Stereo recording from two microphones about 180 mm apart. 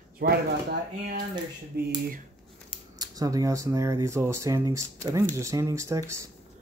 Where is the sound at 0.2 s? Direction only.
60° right (ahead or behind).